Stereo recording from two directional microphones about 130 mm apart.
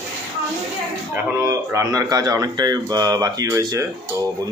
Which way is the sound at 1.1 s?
20° right (ahead or behind).